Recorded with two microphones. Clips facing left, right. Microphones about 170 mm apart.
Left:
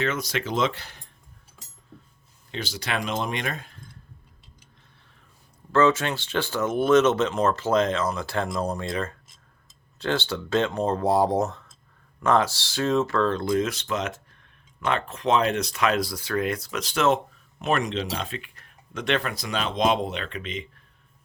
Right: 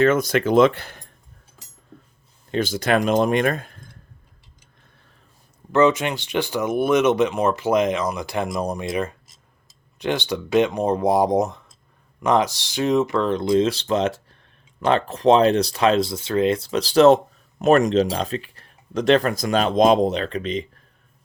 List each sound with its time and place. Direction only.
0.0 s speech: 50° right (ahead or behind)
1.9 s a sound: 45° right (ahead or behind)
2.5 s speech: 50° right (ahead or behind)
5.7 s speech: 15° right (ahead or behind)
13.7 s speech: 30° right (ahead or behind)